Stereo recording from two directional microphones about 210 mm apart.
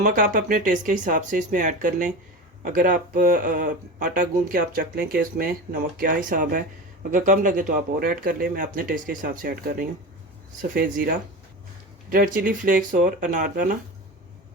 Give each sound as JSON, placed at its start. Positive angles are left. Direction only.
{"t": 0.0, "sound": "speech", "side_deg": -40}
{"t": 12.1, "sound": "speech", "side_deg": -45}